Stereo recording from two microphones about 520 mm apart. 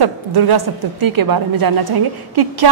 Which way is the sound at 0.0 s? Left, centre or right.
Right.